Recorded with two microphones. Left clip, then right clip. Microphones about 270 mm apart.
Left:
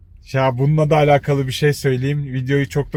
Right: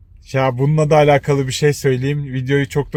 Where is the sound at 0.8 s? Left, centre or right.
Right.